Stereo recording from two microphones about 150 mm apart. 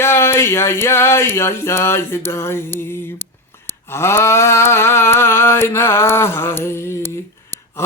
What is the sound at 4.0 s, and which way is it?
Speech, 15° left (ahead or behind).